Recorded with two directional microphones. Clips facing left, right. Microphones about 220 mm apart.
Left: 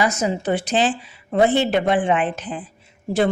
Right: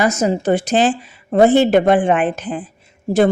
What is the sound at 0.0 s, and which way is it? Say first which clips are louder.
A woman's voice: right 5 dB; 45° right (ahead or behind).